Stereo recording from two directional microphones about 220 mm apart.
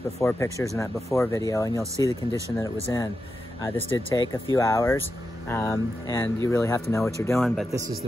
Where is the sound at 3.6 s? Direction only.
15° left (ahead or behind).